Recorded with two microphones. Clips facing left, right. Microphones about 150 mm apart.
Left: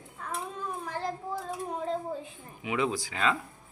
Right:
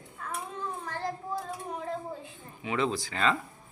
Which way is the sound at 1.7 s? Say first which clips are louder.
Left 4 dB; 20° left (ahead or behind).